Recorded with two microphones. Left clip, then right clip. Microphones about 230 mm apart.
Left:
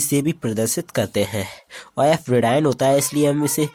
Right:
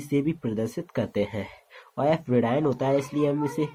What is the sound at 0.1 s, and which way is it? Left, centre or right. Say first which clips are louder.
Speech: left 2 dB; left.